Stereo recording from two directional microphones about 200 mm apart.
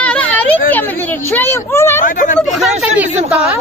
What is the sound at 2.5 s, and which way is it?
Speech, centre (ahead or behind).